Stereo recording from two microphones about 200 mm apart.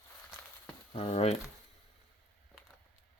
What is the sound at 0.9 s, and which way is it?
Speech, 30° left (ahead or behind).